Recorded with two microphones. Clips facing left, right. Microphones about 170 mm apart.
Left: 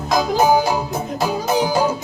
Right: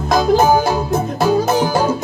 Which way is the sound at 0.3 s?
15° left (ahead or behind).